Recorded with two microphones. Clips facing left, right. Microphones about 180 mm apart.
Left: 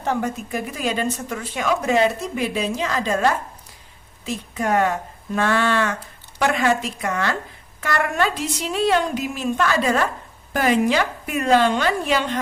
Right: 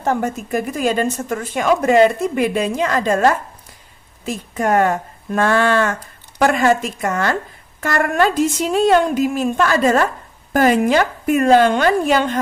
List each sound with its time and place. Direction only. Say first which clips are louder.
0.0 s a woman's voice: right 4 dB; 45° right (ahead or behind)